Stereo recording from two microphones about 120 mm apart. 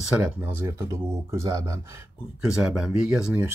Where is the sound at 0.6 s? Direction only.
25° right (ahead or behind).